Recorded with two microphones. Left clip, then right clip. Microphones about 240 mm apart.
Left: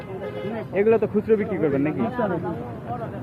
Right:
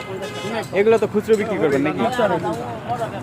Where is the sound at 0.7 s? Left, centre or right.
Centre.